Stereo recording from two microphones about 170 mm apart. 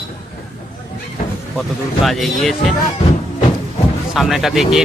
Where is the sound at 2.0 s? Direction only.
Centre (ahead or behind).